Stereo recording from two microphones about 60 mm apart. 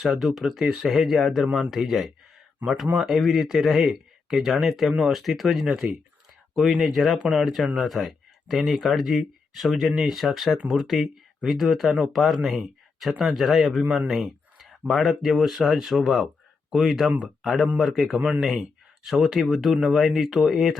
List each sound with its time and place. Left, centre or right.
0.0 s speech: centre
5.6 s speech: centre
6.6 s speech: centre
17.4 s speech: centre
18.2 s speech: centre
19.0 s speech: centre